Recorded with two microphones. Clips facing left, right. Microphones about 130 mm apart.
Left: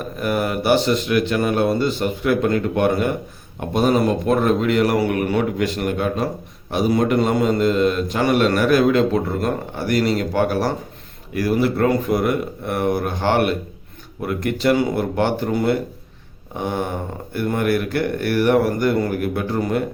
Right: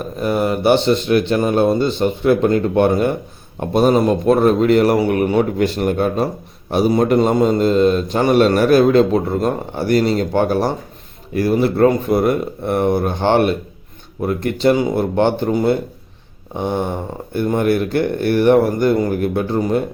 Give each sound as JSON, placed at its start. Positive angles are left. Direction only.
{"t": 0.2, "sound": "a man's voice", "side_deg": -25}